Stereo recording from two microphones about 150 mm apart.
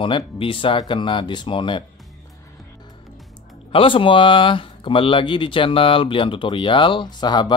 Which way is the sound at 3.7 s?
35° left (ahead or behind).